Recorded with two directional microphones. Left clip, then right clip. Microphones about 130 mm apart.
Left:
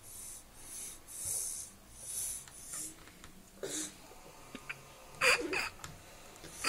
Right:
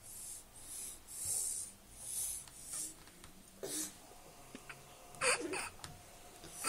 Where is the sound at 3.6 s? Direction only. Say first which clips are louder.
Left 3 dB; 15° right (ahead or behind).